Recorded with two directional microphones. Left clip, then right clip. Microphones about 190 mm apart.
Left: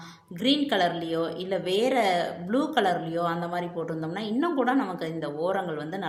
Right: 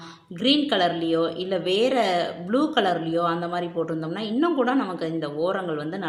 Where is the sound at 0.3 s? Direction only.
30° right (ahead or behind).